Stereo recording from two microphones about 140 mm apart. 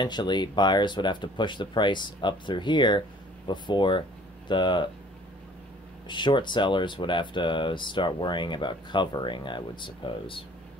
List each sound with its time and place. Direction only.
0.0 s speech: 30° left (ahead or behind)
6.0 s speech: 35° left (ahead or behind)